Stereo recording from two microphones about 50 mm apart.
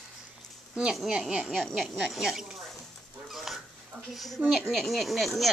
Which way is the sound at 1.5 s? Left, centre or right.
Centre.